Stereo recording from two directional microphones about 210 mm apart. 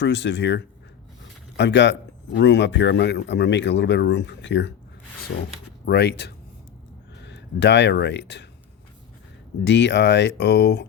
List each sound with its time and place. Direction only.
0.0 s speech: 55° left (ahead or behind)
5.8 s speech: 50° left (ahead or behind)
9.6 s speech: 55° left (ahead or behind)